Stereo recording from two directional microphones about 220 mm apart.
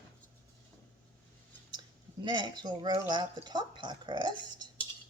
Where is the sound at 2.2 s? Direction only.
20° right (ahead or behind).